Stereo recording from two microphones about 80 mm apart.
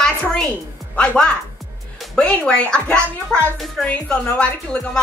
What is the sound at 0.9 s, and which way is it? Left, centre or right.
A child's voice, centre.